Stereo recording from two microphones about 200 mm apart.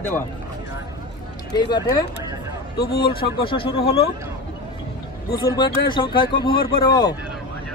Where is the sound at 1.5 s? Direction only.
20° left (ahead or behind).